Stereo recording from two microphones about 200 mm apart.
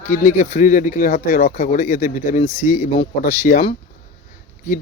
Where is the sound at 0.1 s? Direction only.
35° left (ahead or behind).